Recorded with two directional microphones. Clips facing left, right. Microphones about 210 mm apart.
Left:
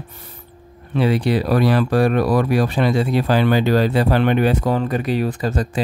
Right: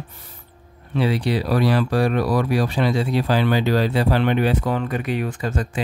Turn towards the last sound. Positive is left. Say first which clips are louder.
# left 4 dB
turn(degrees=35)  # may be behind; listen again after turning